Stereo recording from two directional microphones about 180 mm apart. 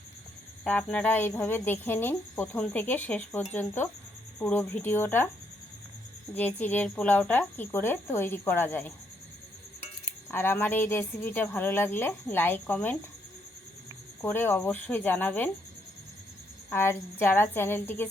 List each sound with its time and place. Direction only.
0.6 s speech: 5° left (ahead or behind)
6.3 s speech: 10° left (ahead or behind)
10.3 s speech: 10° left (ahead or behind)
14.2 s speech: 10° left (ahead or behind)
16.7 s speech: 10° left (ahead or behind)